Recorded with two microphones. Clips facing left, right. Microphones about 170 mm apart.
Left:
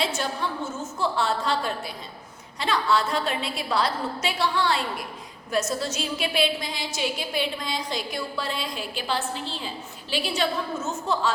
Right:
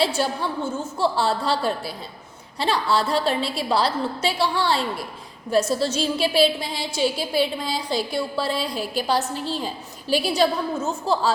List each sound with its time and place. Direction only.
0.0 s a woman's voice: 35° right (ahead or behind)